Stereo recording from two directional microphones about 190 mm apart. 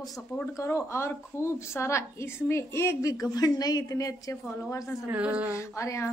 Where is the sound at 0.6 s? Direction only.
15° left (ahead or behind).